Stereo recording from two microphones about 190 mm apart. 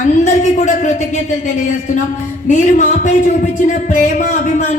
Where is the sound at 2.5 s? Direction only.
40° left (ahead or behind).